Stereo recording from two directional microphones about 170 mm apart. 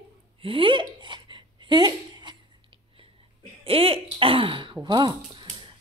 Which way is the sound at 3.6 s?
35° right (ahead or behind).